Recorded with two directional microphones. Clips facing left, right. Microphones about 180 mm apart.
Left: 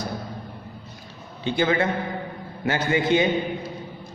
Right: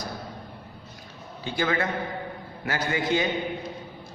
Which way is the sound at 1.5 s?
25° left (ahead or behind).